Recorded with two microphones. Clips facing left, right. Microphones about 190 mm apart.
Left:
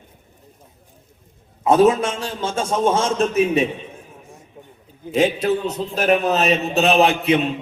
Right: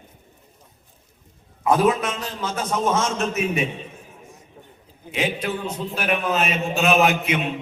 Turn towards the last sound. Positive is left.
turn(degrees=35)  # may be behind; listen again after turning